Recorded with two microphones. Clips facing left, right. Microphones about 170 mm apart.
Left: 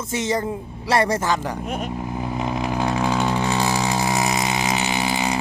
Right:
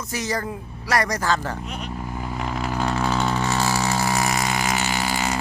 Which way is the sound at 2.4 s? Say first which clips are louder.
Left 2 dB; 15° left (ahead or behind).